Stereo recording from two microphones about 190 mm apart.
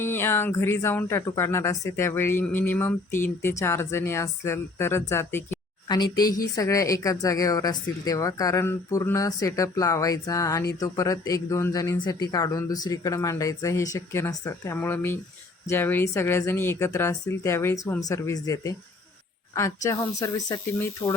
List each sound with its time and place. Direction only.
0.0 s speech: 10° left (ahead or behind)